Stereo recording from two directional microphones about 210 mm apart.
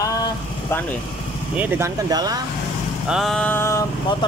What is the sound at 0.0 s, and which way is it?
Vehicle, 15° left (ahead or behind).